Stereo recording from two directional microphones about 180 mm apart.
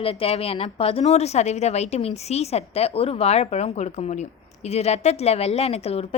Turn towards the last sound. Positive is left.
turn(degrees=35)  # may be behind; listen again after turning